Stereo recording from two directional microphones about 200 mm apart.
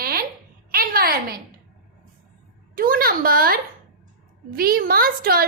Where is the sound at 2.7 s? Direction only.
45° right (ahead or behind).